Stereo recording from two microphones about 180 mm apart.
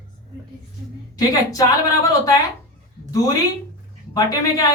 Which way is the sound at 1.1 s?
20° left (ahead or behind).